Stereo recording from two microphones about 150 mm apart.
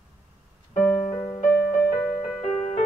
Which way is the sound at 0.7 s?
15° left (ahead or behind).